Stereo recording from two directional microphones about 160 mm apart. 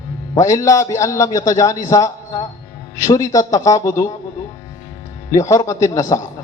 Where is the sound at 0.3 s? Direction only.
20° left (ahead or behind).